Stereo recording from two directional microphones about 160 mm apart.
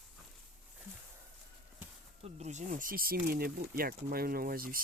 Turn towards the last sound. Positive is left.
turn(degrees=-65)  # may be behind; listen again after turning